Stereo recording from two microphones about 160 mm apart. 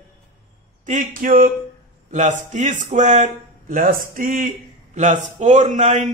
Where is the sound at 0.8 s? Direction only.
55° right (ahead or behind).